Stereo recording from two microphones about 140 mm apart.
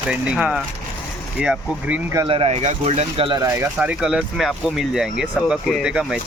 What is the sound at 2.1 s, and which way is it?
Speech, 35° right (ahead or behind).